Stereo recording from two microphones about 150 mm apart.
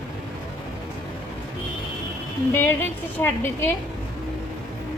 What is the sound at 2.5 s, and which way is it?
A woman's voice, 15° left (ahead or behind).